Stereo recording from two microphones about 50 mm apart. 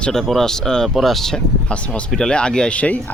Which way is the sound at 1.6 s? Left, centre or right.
Left.